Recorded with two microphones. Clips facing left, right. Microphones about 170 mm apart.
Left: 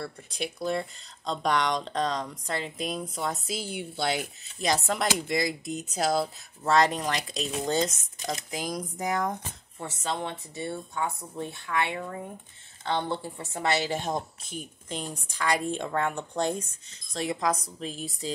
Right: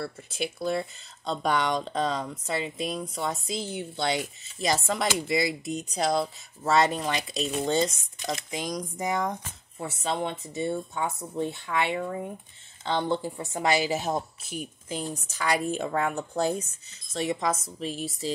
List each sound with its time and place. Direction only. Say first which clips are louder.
0.0 s speech: right 2 dB; 5° right (ahead or behind)
9.8 s speech: right 3 dB; 10° right (ahead or behind)
10.5 s speech: right 4 dB; 20° right (ahead or behind); by 18.3 s centre (ahead or behind)